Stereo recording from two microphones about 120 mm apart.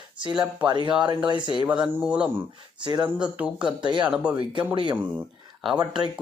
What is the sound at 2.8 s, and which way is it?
Speech, 35° right (ahead or behind).